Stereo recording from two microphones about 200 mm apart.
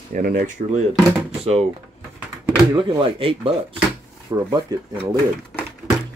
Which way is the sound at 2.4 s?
20° right (ahead or behind).